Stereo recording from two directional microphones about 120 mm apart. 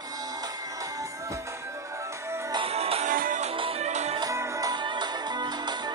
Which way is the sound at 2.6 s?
55° right (ahead or behind).